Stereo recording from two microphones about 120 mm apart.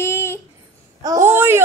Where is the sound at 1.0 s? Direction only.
25° right (ahead or behind).